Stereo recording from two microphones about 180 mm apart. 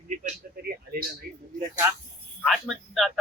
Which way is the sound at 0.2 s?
50° right (ahead or behind).